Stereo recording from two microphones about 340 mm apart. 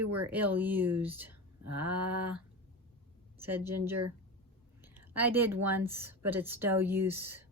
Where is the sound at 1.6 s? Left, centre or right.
Right.